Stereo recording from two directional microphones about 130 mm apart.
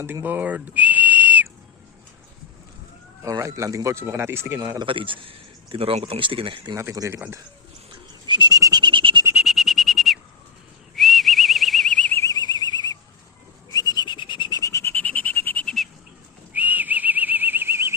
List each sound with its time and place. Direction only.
0.0 s whistle: 20° right (ahead or behind)
3.2 s speech: 25° right (ahead or behind)
4.9 s speech: 40° right (ahead or behind)
6.7 s speech: 25° right (ahead or behind)
8.3 s a sound: 35° right (ahead or behind)
9.3 s a sound: centre (ahead or behind)
10.9 s whistling: centre (ahead or behind)
12.1 s a sound: 25° left (ahead or behind)
13.7 s bird: 30° left (ahead or behind)
14.6 s bird: 25° left (ahead or behind)
16.6 s whistling: 15° right (ahead or behind)